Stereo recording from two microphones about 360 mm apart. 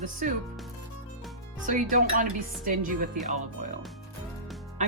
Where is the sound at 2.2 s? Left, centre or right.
Right.